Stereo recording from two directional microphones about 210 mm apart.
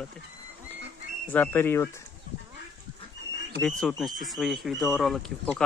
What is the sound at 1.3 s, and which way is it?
Speech, 10° left (ahead or behind).